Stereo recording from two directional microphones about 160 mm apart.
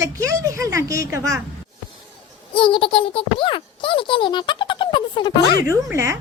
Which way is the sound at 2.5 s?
30° left (ahead or behind).